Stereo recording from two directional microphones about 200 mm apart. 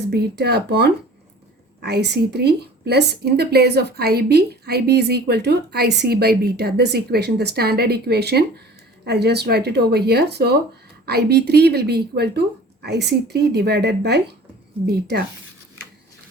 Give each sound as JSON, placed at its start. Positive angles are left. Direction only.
{"t": 0.0, "sound": "a woman's voice", "side_deg": -55}